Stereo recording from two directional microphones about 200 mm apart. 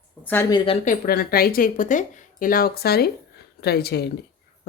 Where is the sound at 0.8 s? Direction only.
45° left (ahead or behind).